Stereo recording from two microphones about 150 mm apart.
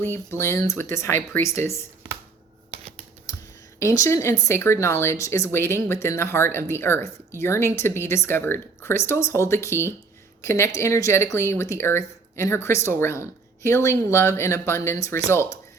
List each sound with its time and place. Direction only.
0.0 s speech: 15° left (ahead or behind)
2.6 s scissors: 45° right (ahead or behind)
3.8 s speech: 20° left (ahead or behind)